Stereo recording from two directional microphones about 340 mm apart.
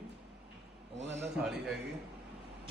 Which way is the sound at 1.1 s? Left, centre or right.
Centre.